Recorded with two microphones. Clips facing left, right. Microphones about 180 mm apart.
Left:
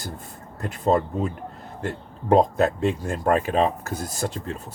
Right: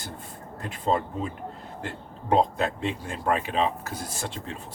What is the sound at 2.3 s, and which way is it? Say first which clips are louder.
Speech: left 5 dB; 45° left (ahead or behind).